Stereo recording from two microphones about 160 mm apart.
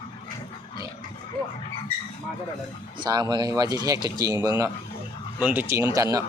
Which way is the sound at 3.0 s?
25° right (ahead or behind).